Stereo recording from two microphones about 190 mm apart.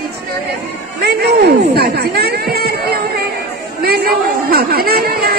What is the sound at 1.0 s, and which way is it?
A woman's voice, 60° right (ahead or behind).